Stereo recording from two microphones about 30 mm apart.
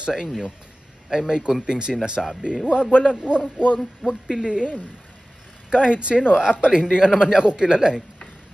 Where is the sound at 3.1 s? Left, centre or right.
Right.